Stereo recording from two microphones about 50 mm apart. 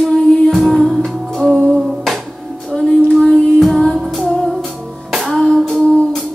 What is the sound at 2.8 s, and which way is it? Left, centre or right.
Child singing, centre.